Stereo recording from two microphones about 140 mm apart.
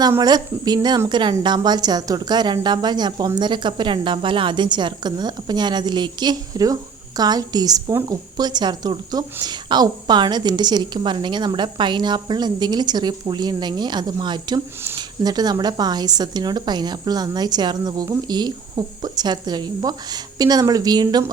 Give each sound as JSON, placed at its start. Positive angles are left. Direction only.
{"t": 0.2, "sound": "a woman's voice", "side_deg": -30}